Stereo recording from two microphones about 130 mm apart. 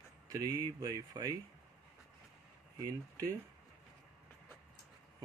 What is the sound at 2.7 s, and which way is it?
Speech, 25° right (ahead or behind).